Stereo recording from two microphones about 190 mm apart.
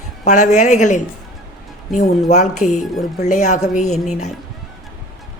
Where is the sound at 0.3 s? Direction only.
40° left (ahead or behind).